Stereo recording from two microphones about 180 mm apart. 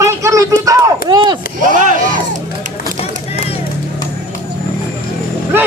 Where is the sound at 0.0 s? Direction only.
15° right (ahead or behind).